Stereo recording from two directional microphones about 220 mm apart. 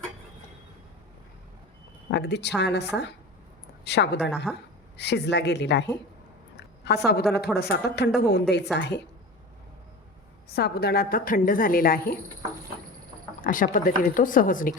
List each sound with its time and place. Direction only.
2.0 s a woman's voice: 50° left (ahead or behind)
4.5 s a woman's voice: 5° left (ahead or behind)
4.9 s a woman's voice: 50° left (ahead or behind)
10.5 s a woman's voice: 45° left (ahead or behind)
13.4 s a woman's voice: 35° left (ahead or behind)